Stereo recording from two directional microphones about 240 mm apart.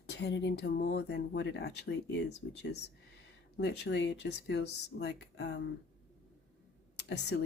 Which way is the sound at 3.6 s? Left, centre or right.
Left.